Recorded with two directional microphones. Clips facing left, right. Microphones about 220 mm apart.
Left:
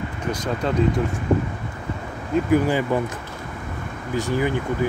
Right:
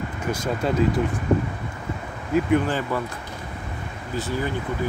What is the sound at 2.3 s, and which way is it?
Speech, 5° left (ahead or behind).